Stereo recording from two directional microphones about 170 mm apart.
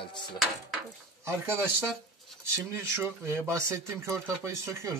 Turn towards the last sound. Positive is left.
turn(degrees=-15)  # may be behind; listen again after turning